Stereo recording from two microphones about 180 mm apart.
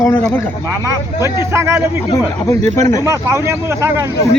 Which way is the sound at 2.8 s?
15° left (ahead or behind).